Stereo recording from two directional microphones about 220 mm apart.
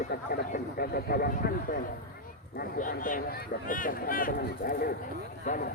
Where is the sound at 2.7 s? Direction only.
35° left (ahead or behind).